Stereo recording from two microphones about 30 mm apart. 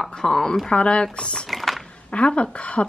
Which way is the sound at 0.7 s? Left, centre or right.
Left.